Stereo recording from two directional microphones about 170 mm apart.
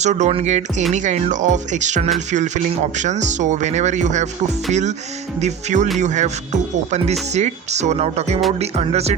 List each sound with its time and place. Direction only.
0.0 s speech: 45° right (ahead or behind)